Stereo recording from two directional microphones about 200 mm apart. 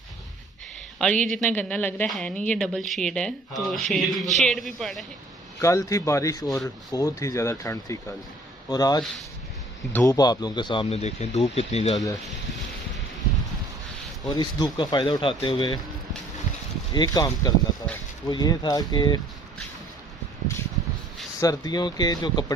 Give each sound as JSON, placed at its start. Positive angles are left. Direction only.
{"t": 0.9, "sound": "a woman's voice", "side_deg": 5}
{"t": 5.6, "sound": "speech", "side_deg": 15}
{"t": 14.2, "sound": "speech", "side_deg": 20}
{"t": 16.9, "sound": "speech", "side_deg": 20}
{"t": 21.4, "sound": "speech", "side_deg": 20}